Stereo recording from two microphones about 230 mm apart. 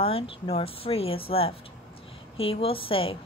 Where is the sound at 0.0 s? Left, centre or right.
Left.